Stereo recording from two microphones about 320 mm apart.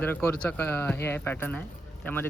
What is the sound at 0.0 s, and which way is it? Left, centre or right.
Speech, centre.